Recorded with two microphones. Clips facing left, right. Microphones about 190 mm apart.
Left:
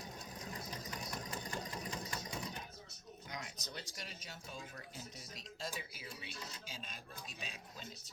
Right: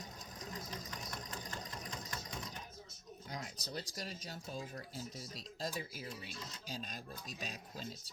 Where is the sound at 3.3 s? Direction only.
35° right (ahead or behind).